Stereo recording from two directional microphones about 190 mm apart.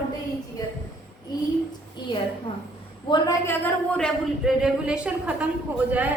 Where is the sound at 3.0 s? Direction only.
20° left (ahead or behind).